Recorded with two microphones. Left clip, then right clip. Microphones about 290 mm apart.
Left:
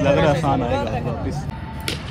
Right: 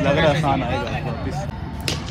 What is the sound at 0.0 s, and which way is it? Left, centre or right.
Speech, centre.